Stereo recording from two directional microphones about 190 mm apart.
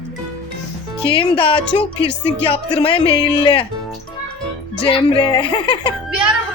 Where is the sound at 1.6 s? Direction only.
5° left (ahead or behind).